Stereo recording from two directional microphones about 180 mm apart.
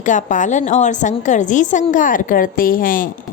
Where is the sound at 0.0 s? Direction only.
45° left (ahead or behind).